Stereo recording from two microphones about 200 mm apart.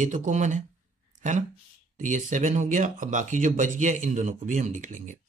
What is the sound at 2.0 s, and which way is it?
Speech, 40° right (ahead or behind).